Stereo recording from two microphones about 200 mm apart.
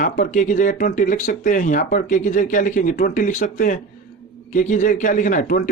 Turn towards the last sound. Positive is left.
turn(degrees=45)  # may be behind; listen again after turning